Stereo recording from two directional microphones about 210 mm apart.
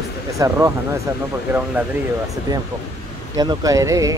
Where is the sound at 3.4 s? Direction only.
15° right (ahead or behind).